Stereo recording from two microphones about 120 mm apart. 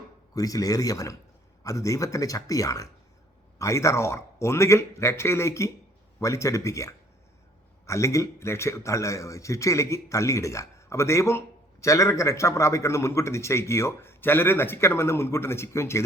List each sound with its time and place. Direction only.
0.3 s a man's voice: 30° left (ahead or behind)